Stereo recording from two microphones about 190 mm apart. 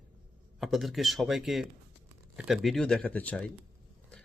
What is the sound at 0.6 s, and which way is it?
Speech, centre (ahead or behind).